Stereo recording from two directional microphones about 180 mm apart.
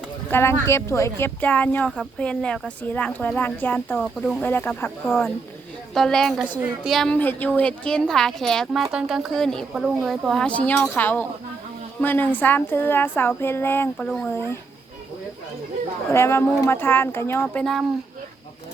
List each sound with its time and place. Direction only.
0.3 s a woman's voice: 15° left (ahead or behind)
4.0 s a woman's voice: centre (ahead or behind)
4.4 s a woman's voice: 10° left (ahead or behind)
5.0 s a woman's voice: centre (ahead or behind)
16.1 s a woman's voice: 15° left (ahead or behind)